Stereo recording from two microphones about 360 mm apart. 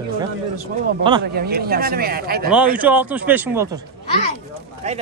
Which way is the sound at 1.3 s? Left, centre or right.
Right.